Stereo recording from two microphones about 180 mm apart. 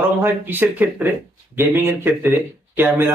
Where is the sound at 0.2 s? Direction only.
10° right (ahead or behind).